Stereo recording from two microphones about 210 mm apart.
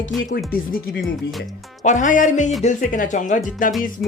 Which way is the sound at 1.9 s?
35° left (ahead or behind).